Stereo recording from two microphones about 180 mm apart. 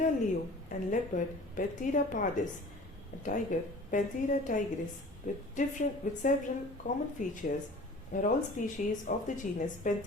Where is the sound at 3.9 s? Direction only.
45° left (ahead or behind).